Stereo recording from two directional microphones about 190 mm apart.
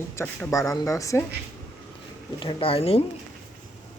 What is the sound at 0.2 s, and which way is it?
Speech, 15° left (ahead or behind).